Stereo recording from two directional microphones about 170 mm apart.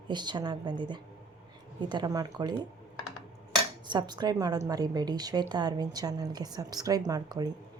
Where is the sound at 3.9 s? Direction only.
25° right (ahead or behind).